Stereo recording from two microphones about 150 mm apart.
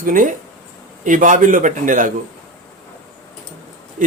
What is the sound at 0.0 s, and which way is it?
Speech, 60° right (ahead or behind).